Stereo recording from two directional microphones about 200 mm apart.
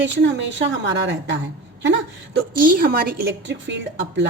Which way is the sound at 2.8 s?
50° right (ahead or behind).